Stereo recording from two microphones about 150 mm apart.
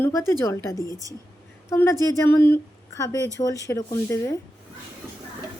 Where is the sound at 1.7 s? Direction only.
15° left (ahead or behind).